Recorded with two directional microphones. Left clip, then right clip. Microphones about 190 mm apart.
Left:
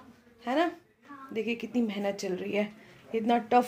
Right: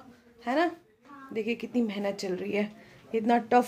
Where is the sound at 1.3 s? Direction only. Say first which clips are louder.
Right 1 dB; centre (ahead or behind).